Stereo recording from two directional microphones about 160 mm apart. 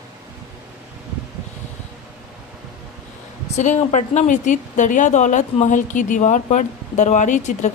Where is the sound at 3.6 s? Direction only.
45° left (ahead or behind).